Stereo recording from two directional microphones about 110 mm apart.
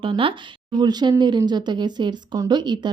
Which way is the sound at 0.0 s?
55° right (ahead or behind).